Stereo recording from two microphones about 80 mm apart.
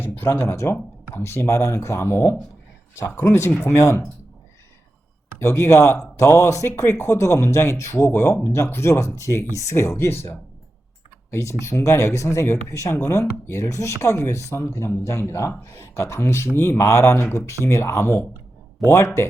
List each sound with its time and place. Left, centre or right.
0.0 s speech: left
5.4 s speech: left